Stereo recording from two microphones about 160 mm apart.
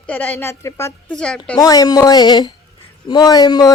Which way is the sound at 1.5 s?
25° left (ahead or behind).